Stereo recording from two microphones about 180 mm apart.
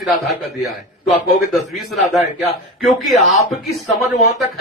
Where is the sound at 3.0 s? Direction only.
Centre (ahead or behind).